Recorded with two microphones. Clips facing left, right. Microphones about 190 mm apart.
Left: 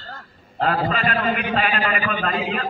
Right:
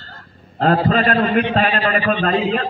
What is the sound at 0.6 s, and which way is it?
A man's voice, 35° right (ahead or behind).